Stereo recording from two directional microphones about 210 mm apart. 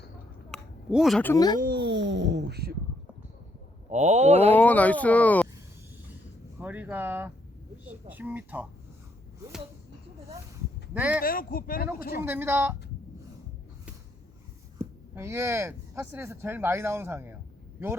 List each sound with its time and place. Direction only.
0.5 s a sound: centre (ahead or behind)
1.3 s speech: 15° left (ahead or behind)
1.5 s a sound: 45° right (ahead or behind)
3.8 s a sound: 35° right (ahead or behind)
4.5 s speech: 5° left (ahead or behind)
6.6 s speech: 5° right (ahead or behind)
10.9 s speech: 5° right (ahead or behind)
11.2 s speech: 45° left (ahead or behind)
12.2 s speech: 10° right (ahead or behind)
14.8 s speech: 10° right (ahead or behind)